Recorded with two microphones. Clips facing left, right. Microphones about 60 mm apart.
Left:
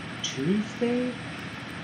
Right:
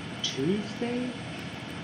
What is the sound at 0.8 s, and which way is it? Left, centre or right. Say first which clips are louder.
Speech: left 8 dB; left.